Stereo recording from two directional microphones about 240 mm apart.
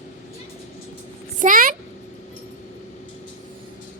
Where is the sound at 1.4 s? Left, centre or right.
Right.